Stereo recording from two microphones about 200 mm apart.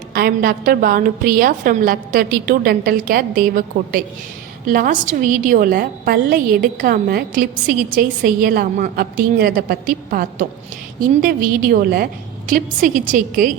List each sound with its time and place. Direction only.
0.1 s a woman's voice: 50° right (ahead or behind)